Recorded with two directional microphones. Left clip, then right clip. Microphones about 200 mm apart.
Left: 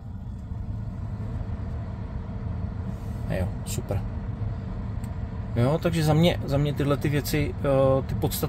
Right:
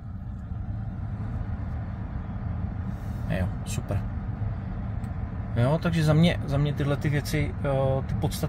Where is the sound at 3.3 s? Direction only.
5° left (ahead or behind).